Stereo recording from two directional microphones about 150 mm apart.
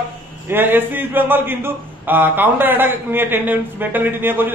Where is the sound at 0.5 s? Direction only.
15° right (ahead or behind).